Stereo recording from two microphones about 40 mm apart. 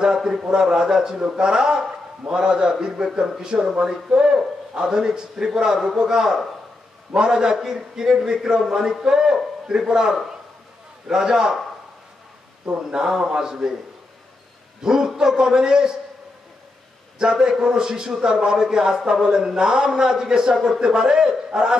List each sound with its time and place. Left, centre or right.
0.0 s a man's voice: centre
12.9 s a man's voice: centre
14.8 s a man's voice: centre
17.2 s a man's voice: right